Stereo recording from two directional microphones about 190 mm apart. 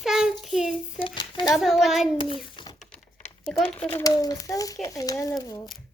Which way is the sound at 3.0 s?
40° left (ahead or behind).